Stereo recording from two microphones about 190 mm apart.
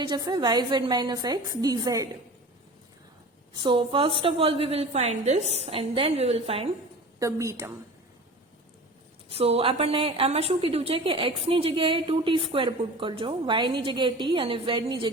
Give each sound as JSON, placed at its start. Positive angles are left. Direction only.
{"t": 0.1, "sound": "a woman's voice", "side_deg": -25}
{"t": 3.6, "sound": "a woman's voice", "side_deg": -25}
{"t": 7.2, "sound": "a woman's voice", "side_deg": -15}
{"t": 9.3, "sound": "a woman's voice", "side_deg": -30}